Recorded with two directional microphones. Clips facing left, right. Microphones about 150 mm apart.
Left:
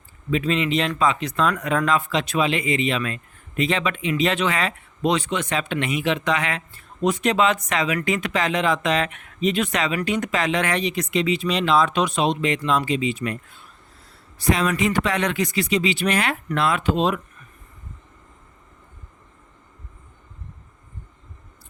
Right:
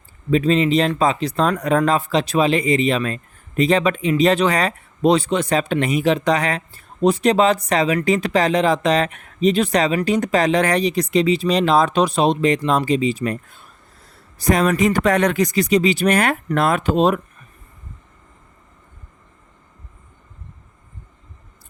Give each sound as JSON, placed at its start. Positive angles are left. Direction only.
{"t": 0.3, "sound": "speech", "side_deg": -35}